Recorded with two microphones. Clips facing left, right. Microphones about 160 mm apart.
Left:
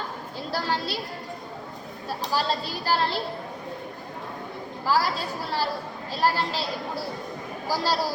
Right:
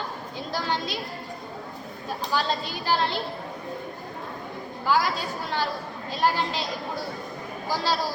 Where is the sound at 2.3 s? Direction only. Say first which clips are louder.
Even; 35° left (ahead or behind).